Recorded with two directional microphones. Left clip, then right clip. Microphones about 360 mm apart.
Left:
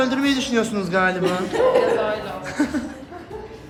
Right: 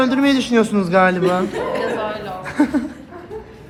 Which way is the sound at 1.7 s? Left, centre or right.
Centre.